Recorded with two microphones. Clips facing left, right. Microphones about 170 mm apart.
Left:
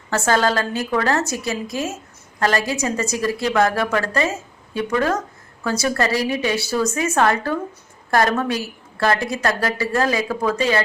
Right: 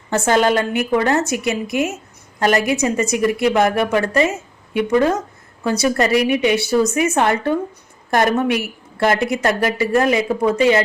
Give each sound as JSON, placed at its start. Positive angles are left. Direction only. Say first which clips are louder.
{"t": 0.3, "sound": "speech", "louder": "right 3 dB", "side_deg": -20}